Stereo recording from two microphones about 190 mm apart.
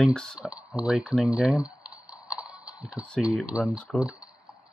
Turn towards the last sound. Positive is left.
turn(degrees=0)  # may be behind; listen again after turning